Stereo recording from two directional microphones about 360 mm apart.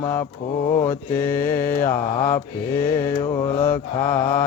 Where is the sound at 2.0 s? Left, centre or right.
Centre.